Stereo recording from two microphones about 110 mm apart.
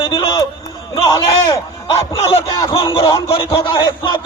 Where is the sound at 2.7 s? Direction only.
40° left (ahead or behind).